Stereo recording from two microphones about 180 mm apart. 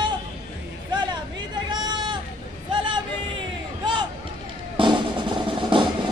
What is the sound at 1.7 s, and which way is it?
Hubbub, 25° right (ahead or behind).